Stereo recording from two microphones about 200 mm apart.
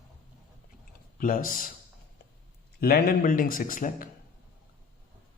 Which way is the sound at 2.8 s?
50° left (ahead or behind).